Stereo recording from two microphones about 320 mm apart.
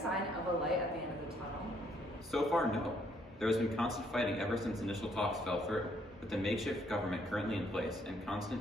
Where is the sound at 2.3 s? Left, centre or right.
Centre.